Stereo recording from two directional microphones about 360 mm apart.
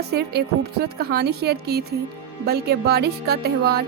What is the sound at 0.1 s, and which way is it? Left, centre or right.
A woman's voice, right.